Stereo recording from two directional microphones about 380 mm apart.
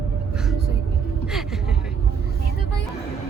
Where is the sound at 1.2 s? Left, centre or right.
Centre.